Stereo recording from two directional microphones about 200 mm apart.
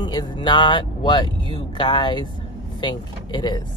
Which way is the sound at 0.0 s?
20° left (ahead or behind).